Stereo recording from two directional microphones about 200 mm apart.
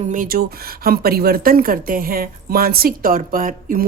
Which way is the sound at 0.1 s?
45° right (ahead or behind).